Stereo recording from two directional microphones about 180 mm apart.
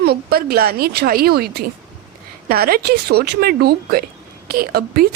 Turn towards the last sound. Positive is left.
turn(degrees=-60)  # may be behind; listen again after turning